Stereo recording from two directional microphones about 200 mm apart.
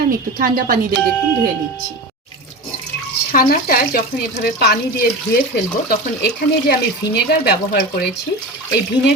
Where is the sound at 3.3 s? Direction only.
45° left (ahead or behind).